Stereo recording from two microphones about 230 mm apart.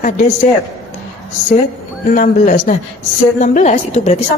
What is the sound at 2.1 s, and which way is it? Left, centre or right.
A woman's voice, left.